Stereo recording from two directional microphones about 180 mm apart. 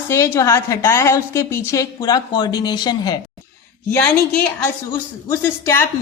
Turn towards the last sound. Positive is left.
turn(degrees=15)  # may be behind; listen again after turning